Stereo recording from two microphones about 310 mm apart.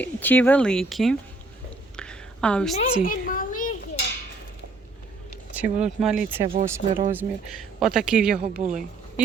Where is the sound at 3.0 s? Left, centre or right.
Left.